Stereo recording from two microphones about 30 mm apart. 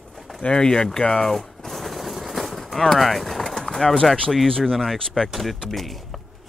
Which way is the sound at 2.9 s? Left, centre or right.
Centre.